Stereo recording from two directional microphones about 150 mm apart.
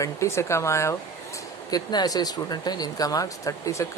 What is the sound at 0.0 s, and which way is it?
Speech, 20° left (ahead or behind).